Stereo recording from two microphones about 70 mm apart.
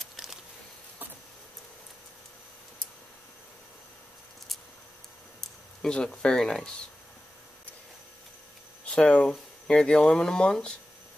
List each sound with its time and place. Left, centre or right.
0.0 s a sound: centre
5.4 s speech: centre
8.8 s speech: centre